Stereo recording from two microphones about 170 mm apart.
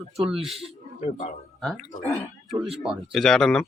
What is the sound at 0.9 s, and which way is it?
Speech, 45° left (ahead or behind).